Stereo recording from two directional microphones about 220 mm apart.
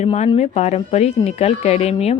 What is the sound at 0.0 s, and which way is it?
Speech, 30° left (ahead or behind).